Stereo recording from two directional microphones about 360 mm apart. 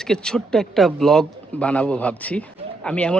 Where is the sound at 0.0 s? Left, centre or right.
Centre.